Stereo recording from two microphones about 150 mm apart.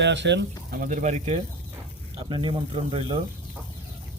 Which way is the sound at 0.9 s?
50° right (ahead or behind).